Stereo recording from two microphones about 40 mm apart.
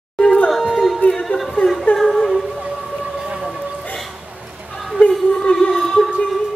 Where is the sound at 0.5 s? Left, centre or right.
Centre.